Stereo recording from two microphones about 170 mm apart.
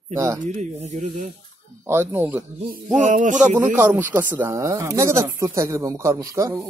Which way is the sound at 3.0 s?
45° right (ahead or behind).